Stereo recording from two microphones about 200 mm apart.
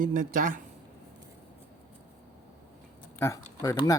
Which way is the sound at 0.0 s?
45° right (ahead or behind).